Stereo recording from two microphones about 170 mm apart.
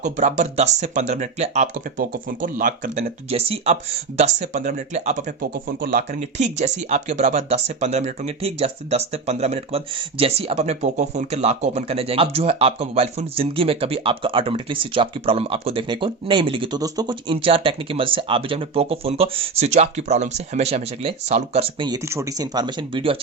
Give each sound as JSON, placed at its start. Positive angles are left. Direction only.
{"t": 0.0, "sound": "speech", "side_deg": -45}
{"t": 3.2, "sound": "speech", "side_deg": -35}